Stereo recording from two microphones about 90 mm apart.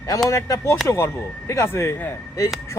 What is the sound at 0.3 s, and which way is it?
A man's voice, 35° left (ahead or behind).